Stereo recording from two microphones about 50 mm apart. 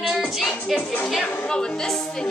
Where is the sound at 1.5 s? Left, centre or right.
Centre.